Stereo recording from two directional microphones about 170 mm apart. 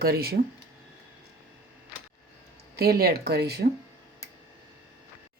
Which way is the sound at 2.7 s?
65° right (ahead or behind).